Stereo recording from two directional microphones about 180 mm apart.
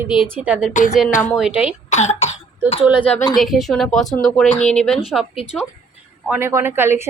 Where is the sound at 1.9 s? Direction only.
40° left (ahead or behind).